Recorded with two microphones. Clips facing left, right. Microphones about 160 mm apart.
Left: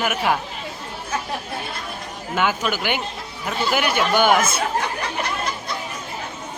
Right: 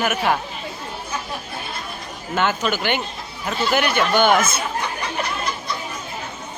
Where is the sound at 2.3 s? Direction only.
10° left (ahead or behind).